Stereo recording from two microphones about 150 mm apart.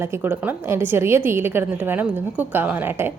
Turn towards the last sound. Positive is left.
turn(degrees=-15)  # may be behind; listen again after turning